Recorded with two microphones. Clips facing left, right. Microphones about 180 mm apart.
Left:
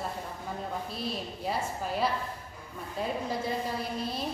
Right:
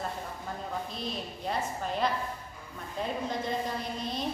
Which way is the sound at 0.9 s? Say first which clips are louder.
Left 1 dB; 5° left (ahead or behind).